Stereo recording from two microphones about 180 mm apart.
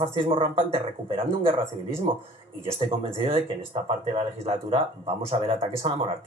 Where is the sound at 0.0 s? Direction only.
30° right (ahead or behind).